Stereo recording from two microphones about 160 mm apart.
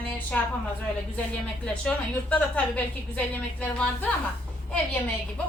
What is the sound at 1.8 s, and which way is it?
A woman's voice, 5° left (ahead or behind).